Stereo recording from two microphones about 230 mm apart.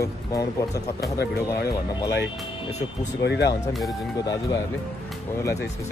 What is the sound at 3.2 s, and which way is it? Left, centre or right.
Speech, left.